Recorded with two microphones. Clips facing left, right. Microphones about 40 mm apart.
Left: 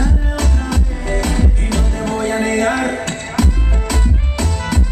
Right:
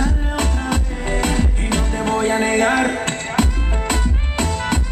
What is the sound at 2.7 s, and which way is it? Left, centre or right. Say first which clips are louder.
Music: right 1 dB; centre.